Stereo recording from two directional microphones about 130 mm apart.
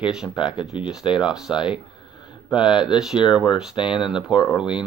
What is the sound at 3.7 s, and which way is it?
Speech, 40° left (ahead or behind).